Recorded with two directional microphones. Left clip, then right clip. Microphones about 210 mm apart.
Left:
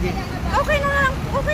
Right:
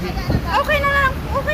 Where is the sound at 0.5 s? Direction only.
5° left (ahead or behind).